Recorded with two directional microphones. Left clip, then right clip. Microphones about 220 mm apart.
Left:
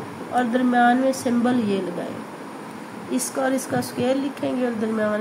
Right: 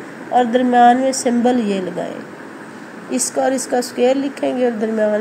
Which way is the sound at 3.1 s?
20° right (ahead or behind).